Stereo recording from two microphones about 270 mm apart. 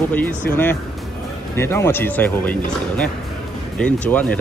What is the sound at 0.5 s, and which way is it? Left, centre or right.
Speech, centre.